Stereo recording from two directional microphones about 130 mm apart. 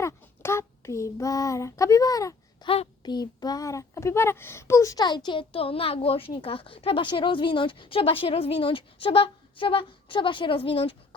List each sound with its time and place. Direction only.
0.0 s child singing: 20° left (ahead or behind)
2.6 s a woman's voice: 30° left (ahead or behind)